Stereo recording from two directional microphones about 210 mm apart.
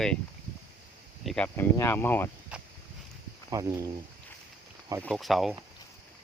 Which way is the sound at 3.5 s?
15° right (ahead or behind).